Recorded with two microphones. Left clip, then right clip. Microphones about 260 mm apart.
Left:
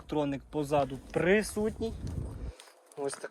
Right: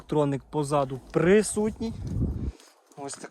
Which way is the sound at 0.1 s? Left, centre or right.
Right.